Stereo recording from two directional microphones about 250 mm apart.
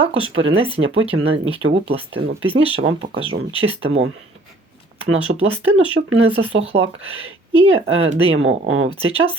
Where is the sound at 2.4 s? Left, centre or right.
Right.